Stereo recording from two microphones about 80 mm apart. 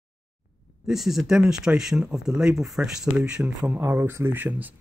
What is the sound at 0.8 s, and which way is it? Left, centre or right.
Speech, centre.